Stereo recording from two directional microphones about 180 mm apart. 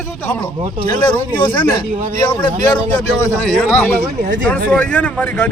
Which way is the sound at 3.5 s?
5° left (ahead or behind).